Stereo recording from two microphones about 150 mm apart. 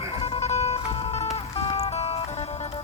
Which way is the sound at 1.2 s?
40° left (ahead or behind).